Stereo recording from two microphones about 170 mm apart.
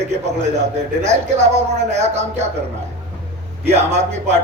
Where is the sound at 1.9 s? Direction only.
40° right (ahead or behind).